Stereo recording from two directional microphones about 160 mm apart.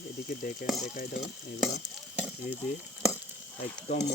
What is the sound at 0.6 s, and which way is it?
Frying, centre (ahead or behind).